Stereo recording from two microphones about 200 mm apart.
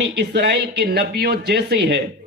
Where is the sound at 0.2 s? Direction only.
55° right (ahead or behind).